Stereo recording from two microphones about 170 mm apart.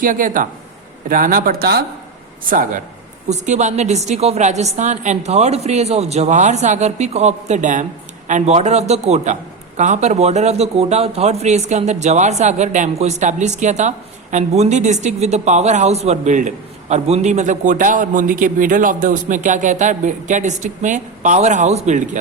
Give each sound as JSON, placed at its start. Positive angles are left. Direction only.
{"t": 0.0, "sound": "a man's voice", "side_deg": -50}
{"t": 2.5, "sound": "a man's voice", "side_deg": -55}